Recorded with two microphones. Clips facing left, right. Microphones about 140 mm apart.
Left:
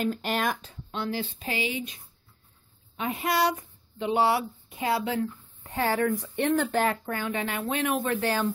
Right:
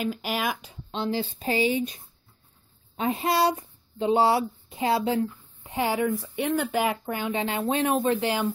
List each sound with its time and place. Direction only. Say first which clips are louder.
0.0 s speech: left 1 dB; 5° right (ahead or behind)
1.0 s speech: right 5 dB; 30° right (ahead or behind)
3.0 s speech: right 3 dB; 30° right (ahead or behind)